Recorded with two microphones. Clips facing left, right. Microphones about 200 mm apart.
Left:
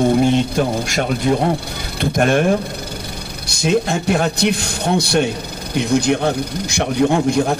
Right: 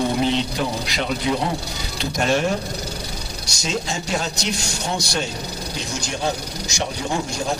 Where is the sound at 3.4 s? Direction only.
60° left (ahead or behind).